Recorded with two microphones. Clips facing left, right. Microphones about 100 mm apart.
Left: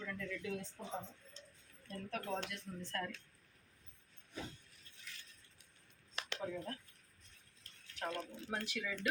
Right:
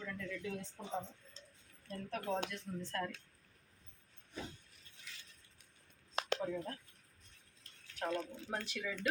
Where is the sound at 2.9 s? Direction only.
20° right (ahead or behind).